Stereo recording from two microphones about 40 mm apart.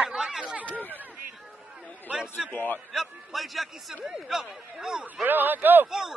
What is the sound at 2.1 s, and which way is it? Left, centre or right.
Speech, right.